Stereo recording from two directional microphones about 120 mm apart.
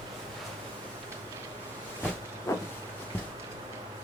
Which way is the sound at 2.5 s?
20° left (ahead or behind).